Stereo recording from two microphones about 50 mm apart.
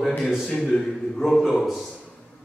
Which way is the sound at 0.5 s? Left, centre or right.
Centre.